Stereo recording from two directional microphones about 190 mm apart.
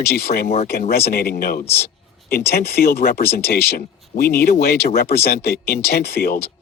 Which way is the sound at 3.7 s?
50° left (ahead or behind).